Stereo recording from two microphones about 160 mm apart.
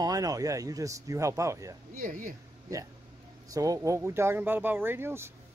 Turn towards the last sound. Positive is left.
turn(degrees=-15)  # may be behind; listen again after turning